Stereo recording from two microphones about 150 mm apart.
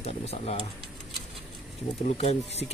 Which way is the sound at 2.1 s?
45° left (ahead or behind).